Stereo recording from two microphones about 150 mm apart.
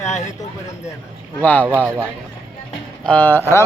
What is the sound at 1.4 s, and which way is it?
Speech, 10° left (ahead or behind).